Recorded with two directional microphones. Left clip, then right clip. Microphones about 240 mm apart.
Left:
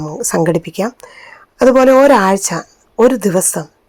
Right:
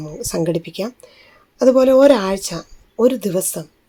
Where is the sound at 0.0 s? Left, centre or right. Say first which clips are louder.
Left 7 dB; left.